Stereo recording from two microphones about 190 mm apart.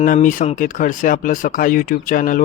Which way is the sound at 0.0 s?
45° left (ahead or behind).